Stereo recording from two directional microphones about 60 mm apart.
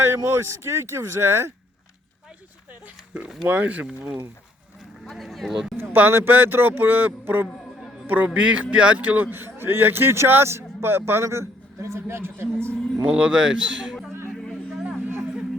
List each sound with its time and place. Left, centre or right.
0.3 s speech: right
3.4 s a man's voice: right
4.0 s speech: right
5.1 s speech: centre
5.9 s a man's voice: right
13.1 s a man's voice: centre
14.8 s a sound: centre